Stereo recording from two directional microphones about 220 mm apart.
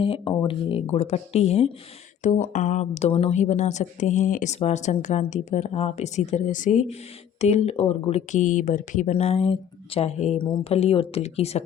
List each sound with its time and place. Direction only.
0.0 s speech: 25° left (ahead or behind)